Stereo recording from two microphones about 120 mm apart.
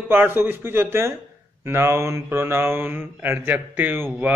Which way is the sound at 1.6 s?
20° right (ahead or behind).